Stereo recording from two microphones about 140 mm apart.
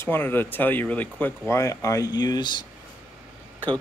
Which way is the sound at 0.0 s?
15° left (ahead or behind).